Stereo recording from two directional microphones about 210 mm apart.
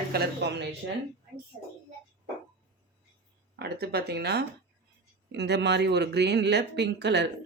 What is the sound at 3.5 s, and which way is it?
Speech, 50° right (ahead or behind).